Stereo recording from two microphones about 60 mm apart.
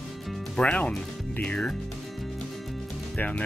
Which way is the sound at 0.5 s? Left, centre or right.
Centre.